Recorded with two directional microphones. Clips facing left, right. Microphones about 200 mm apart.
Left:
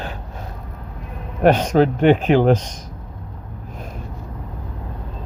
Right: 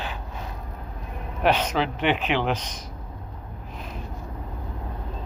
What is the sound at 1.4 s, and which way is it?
Speech, 45° left (ahead or behind).